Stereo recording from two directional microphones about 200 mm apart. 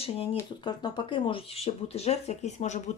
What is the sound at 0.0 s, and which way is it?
Speech, 30° left (ahead or behind).